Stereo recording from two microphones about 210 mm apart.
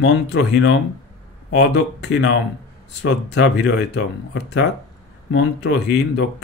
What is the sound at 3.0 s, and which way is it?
Speech, 55° left (ahead or behind).